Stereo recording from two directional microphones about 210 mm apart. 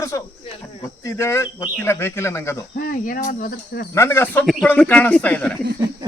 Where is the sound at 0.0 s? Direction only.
15° left (ahead or behind).